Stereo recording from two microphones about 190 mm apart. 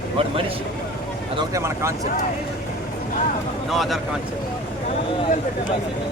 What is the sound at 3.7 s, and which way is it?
Speech, centre (ahead or behind).